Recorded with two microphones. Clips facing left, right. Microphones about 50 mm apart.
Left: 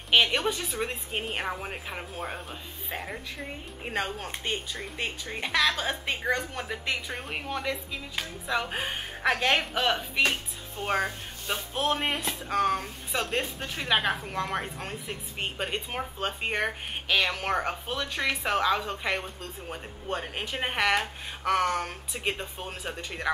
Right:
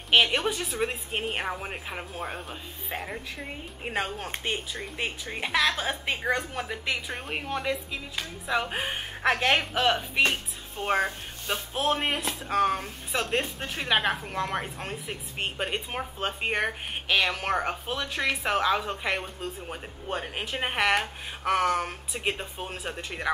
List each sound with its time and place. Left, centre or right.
0.1 s a woman's voice: centre